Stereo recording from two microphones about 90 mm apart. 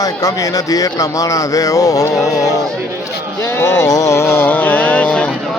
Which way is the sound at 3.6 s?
40° left (ahead or behind).